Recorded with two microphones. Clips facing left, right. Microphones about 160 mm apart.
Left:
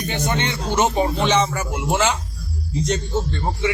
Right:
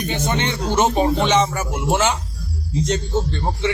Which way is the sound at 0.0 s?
20° right (ahead or behind).